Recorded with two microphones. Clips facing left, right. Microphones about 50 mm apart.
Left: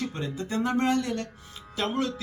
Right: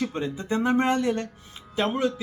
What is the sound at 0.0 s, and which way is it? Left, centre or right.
A man's voice, right.